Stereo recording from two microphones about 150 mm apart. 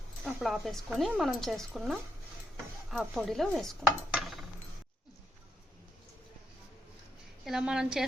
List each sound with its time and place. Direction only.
0.3 s speech: 5° right (ahead or behind)
2.9 s dishes: centre (ahead or behind)
7.4 s speech: 5° right (ahead or behind)